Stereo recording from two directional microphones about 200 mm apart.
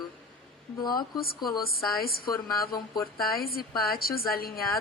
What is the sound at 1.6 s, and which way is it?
A woman's voice, 50° left (ahead or behind).